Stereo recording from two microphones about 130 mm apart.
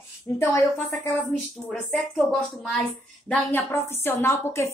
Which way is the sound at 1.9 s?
5° left (ahead or behind).